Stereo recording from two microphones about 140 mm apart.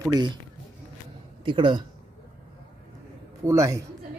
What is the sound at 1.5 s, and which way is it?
Speech, 35° right (ahead or behind).